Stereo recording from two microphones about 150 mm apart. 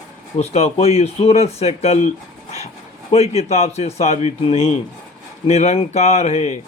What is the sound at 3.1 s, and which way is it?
Speech, 45° left (ahead or behind).